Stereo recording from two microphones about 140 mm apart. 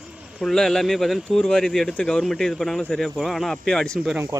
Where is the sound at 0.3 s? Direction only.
5° left (ahead or behind).